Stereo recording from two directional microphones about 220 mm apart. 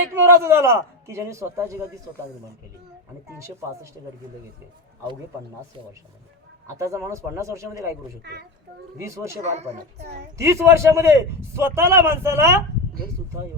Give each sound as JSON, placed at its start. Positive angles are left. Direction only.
{"t": 0.1, "sound": "a man's voice", "side_deg": -10}
{"t": 6.7, "sound": "a man's voice", "side_deg": -15}
{"t": 8.2, "sound": "a child's voice", "side_deg": -50}
{"t": 9.0, "sound": "a man's voice", "side_deg": -15}
{"t": 9.4, "sound": "speech", "side_deg": -30}
{"t": 10.3, "sound": "a man's voice", "side_deg": -15}